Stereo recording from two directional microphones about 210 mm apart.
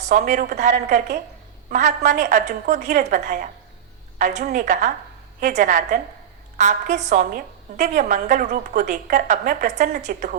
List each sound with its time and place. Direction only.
0.0 s a woman's voice: 35° right (ahead or behind)
4.2 s a woman's voice: 35° right (ahead or behind)
7.1 s a woman's voice: 35° right (ahead or behind)